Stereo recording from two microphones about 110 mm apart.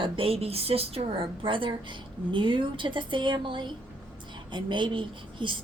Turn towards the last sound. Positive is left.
turn(degrees=-50)  # may be behind; listen again after turning